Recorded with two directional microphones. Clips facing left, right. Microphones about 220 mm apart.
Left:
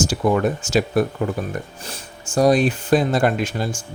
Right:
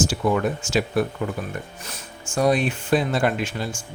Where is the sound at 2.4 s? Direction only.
35° left (ahead or behind).